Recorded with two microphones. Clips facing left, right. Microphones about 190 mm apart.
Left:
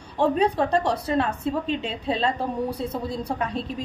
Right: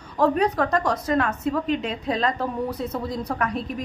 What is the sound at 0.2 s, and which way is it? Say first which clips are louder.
A woman's voice: even; 30° left (ahead or behind).